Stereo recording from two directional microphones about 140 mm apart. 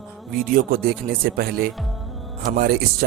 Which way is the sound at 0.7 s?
90° right.